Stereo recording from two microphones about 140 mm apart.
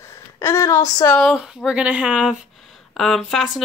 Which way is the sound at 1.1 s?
Centre (ahead or behind).